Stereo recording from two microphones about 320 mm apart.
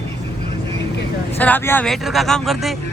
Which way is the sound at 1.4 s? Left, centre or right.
Centre.